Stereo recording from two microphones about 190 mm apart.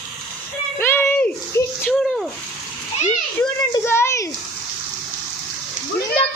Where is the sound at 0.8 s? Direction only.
10° left (ahead or behind).